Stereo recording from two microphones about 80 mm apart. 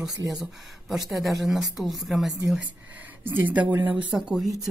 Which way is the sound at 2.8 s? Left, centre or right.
Right.